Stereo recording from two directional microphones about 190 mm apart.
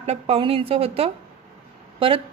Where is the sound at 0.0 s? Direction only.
35° right (ahead or behind).